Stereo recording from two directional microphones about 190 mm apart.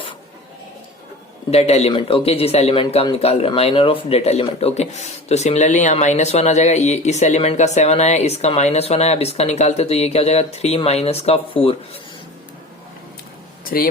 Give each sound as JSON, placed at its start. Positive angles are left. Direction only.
{"t": 1.5, "sound": "speech", "side_deg": 35}